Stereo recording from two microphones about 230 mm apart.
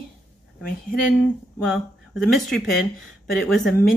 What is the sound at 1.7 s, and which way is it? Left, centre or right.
Speech, centre.